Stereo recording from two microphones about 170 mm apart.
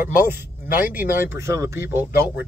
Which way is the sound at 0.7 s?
10° right (ahead or behind).